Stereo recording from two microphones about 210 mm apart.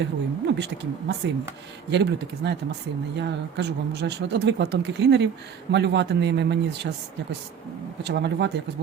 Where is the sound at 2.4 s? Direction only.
55° right (ahead or behind).